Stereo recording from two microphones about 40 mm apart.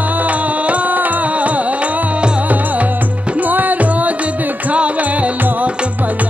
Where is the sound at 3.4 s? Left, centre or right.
Right.